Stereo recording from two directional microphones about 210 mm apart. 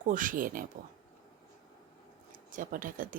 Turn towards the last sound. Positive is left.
turn(degrees=-40)  # may be behind; listen again after turning